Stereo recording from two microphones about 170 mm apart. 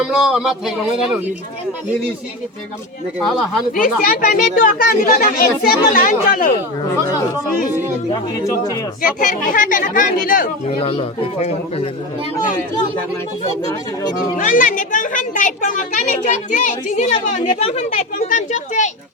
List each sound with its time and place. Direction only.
0.0 s speech: 5° right (ahead or behind)
3.7 s a child's voice: 55° left (ahead or behind)
8.1 s speech: 20° left (ahead or behind)
9.0 s a child's voice: 50° left (ahead or behind)
10.8 s a man's voice: 35° left (ahead or behind)
14.3 s a child's voice: 50° left (ahead or behind)